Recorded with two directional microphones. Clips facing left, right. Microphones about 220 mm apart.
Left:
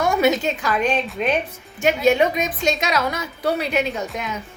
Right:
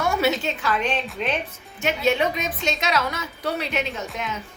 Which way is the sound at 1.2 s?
10° left (ahead or behind).